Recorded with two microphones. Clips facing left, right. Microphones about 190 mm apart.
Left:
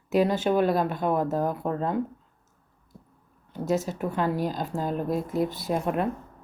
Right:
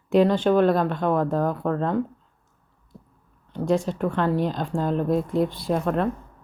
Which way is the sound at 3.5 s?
5° left (ahead or behind).